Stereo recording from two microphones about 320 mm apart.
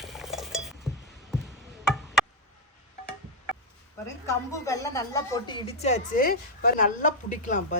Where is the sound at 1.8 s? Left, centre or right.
Centre.